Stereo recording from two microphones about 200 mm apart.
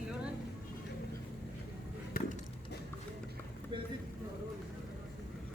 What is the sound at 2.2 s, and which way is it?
Wood, 45° left (ahead or behind).